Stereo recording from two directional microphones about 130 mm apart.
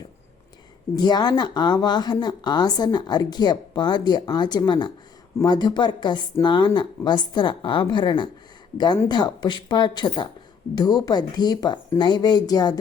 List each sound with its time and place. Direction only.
0.9 s speech: 35° left (ahead or behind)